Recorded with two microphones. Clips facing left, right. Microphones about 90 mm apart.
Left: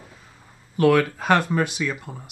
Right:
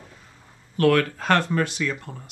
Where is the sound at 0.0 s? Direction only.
5° left (ahead or behind).